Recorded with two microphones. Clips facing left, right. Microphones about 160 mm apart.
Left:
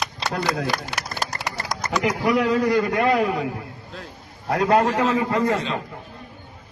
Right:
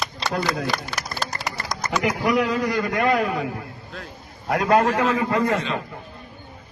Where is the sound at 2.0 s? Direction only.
30° left (ahead or behind).